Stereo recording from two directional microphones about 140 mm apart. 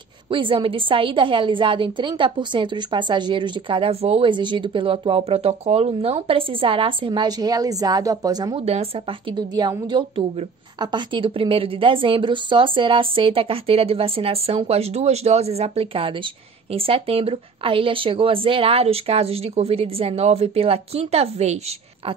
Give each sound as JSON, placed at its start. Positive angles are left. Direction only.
{"t": 0.3, "sound": "a woman's voice", "side_deg": -35}
{"t": 8.5, "sound": "speech", "side_deg": -45}
{"t": 9.6, "sound": "a woman's voice", "side_deg": -30}